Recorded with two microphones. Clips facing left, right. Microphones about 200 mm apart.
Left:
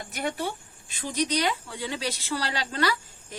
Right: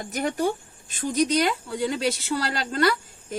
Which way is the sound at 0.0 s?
45° right (ahead or behind).